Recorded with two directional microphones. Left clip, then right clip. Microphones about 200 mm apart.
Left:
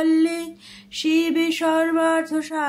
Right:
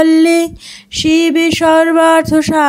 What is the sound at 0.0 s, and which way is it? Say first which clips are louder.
Music: right 11 dB; 45° right (ahead or behind).